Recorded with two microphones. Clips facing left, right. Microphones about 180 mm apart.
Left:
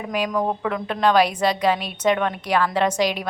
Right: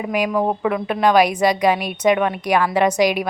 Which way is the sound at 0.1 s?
10° right (ahead or behind).